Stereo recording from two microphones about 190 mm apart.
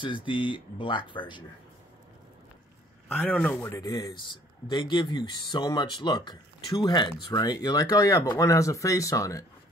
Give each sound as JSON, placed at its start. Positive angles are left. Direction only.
{"t": 0.0, "sound": "a man's voice", "side_deg": 25}
{"t": 3.1, "sound": "a man's voice", "side_deg": 5}